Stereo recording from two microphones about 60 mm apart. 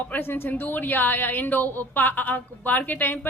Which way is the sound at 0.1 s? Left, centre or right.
Left.